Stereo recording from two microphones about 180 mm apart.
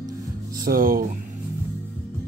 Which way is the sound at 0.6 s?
55° right (ahead or behind).